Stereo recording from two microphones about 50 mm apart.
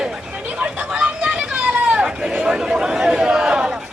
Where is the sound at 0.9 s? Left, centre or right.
Right.